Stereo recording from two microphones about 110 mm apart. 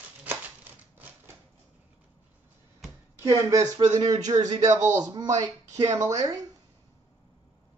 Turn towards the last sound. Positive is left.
turn(degrees=-25)  # may be behind; listen again after turning